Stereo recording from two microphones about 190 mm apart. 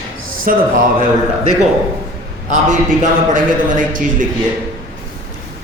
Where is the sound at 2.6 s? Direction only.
45° right (ahead or behind).